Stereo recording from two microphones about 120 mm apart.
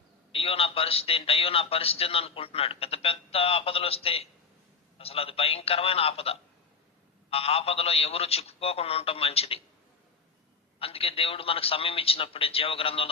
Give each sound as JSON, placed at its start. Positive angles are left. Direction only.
{"t": 0.3, "sound": "a man's voice", "side_deg": 55}
{"t": 10.8, "sound": "a man's voice", "side_deg": 50}